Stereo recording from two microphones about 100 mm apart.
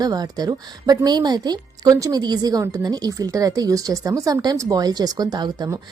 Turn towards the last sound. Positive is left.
turn(degrees=-45)  # may be behind; listen again after turning